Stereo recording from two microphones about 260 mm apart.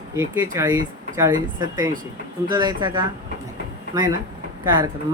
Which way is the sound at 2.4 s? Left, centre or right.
Centre.